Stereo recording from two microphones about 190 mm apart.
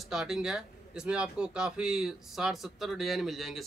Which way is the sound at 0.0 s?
Centre (ahead or behind).